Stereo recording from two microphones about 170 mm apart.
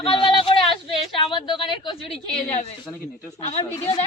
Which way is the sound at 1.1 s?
30° left (ahead or behind).